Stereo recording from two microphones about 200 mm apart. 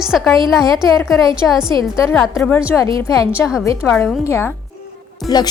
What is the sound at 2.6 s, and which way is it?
Speech, 15° left (ahead or behind).